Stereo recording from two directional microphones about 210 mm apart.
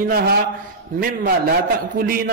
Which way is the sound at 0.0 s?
45° right (ahead or behind).